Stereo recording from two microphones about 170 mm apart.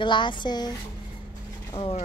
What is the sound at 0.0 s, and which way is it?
Speech, 30° left (ahead or behind).